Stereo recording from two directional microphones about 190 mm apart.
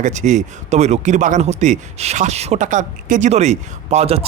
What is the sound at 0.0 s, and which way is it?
Speech, 40° right (ahead or behind).